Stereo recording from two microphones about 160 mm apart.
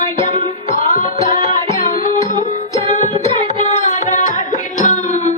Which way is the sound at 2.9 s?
45° left (ahead or behind).